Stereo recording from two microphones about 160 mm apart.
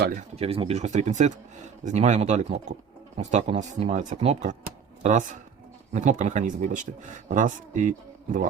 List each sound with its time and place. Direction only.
0.2 s speech: 40° right (ahead or behind)
5.9 s speech: 50° right (ahead or behind)